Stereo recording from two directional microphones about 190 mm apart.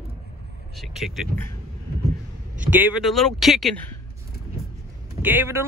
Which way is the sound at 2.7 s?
5° right (ahead or behind).